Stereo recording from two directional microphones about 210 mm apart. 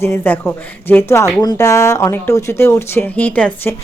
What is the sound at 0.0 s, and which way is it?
Speech, 10° left (ahead or behind).